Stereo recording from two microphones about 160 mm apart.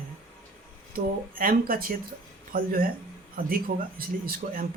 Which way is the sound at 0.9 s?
65° right (ahead or behind).